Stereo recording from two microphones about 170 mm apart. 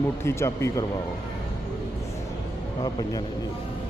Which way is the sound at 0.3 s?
15° left (ahead or behind).